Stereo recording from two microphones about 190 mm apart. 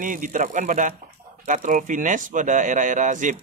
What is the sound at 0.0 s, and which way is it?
Speech, 45° right (ahead or behind).